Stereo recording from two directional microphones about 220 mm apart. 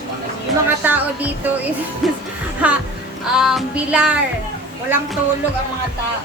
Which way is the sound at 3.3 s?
Centre (ahead or behind).